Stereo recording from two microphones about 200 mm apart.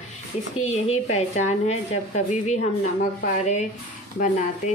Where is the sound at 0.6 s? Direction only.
35° left (ahead or behind).